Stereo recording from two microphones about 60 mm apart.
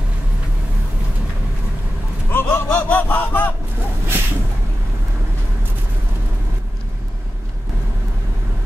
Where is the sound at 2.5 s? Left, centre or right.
Left.